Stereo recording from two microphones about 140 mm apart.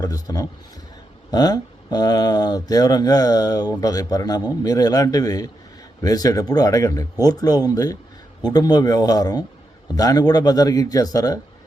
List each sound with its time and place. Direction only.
0.0 s speech: 25° left (ahead or behind)